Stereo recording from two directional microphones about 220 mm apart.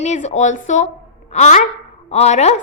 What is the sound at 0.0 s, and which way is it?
A woman's voice, 30° left (ahead or behind).